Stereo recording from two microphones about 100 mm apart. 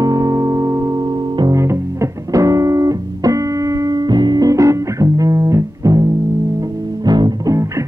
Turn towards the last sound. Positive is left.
turn(degrees=-45)  # may be behind; listen again after turning